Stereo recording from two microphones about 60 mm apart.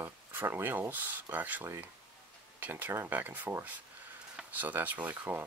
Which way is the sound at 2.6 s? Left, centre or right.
Right.